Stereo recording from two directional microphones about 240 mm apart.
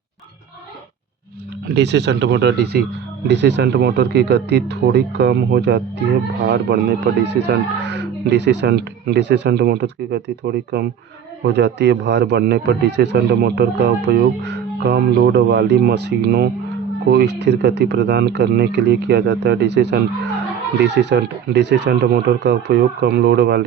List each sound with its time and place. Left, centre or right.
1.6 s speech: right